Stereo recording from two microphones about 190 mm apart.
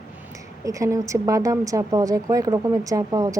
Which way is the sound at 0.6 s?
15° right (ahead or behind).